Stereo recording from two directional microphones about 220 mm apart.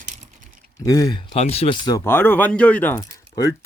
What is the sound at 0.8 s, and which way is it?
Speech, 15° left (ahead or behind).